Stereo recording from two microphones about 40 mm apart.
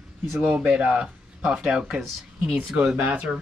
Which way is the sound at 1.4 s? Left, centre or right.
Centre.